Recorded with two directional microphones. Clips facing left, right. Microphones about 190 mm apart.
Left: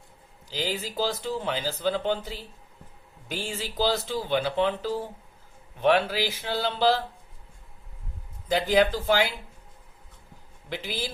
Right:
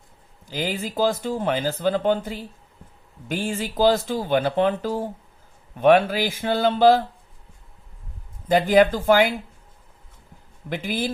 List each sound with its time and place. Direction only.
0.4 s speech: 55° right (ahead or behind)
8.4 s speech: 50° right (ahead or behind)
10.7 s speech: 50° right (ahead or behind)